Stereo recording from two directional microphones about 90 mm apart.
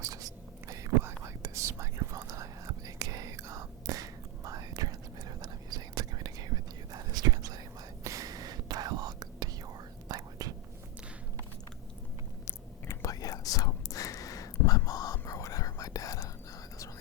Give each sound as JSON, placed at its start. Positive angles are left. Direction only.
{"t": 0.0, "sound": "whispering", "side_deg": -40}
{"t": 12.5, "sound": "whispering", "side_deg": 35}